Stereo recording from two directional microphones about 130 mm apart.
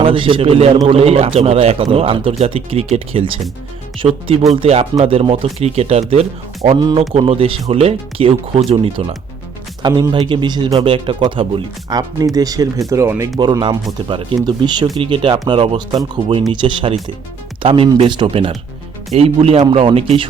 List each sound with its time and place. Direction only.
0.0 s speech: 40° right (ahead or behind)
9.8 s speech: 35° right (ahead or behind)
13.4 s speech: 35° right (ahead or behind)